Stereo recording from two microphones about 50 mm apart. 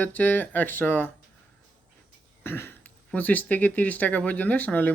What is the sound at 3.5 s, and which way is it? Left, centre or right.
Speech, left.